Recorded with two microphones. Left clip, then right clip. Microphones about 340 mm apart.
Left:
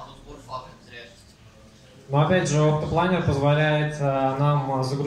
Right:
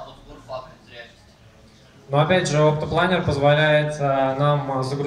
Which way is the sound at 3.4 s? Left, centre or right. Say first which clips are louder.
Right 7 dB; right.